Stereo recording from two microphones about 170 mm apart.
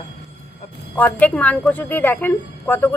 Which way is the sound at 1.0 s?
10° left (ahead or behind).